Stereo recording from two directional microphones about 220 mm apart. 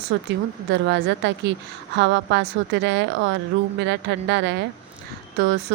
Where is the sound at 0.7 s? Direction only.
50° right (ahead or behind).